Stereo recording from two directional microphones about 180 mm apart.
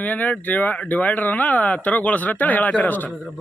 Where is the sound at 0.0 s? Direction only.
10° left (ahead or behind).